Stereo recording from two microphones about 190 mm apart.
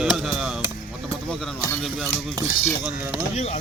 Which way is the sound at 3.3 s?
35° left (ahead or behind).